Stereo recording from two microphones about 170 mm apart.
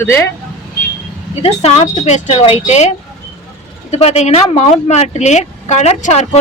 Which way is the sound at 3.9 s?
40° left (ahead or behind).